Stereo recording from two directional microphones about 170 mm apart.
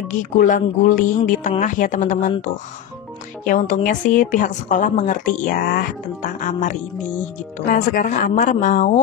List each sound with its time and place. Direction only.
0.2 s a woman's voice: 50° left (ahead or behind)
3.4 s a woman's voice: 50° left (ahead or behind)